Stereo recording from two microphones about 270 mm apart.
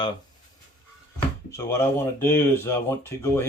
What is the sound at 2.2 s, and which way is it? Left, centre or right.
Speech, centre.